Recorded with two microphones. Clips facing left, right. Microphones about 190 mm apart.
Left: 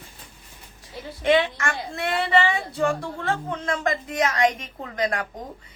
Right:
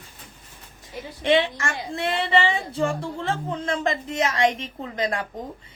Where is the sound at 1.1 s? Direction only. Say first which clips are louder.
Even; 25° right (ahead or behind).